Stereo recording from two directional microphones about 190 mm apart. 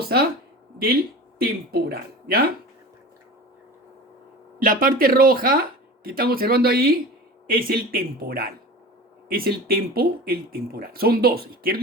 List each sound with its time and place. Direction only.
0.0 s speech: 55° right (ahead or behind)
1.4 s speech: 55° right (ahead or behind)
4.6 s speech: 45° right (ahead or behind)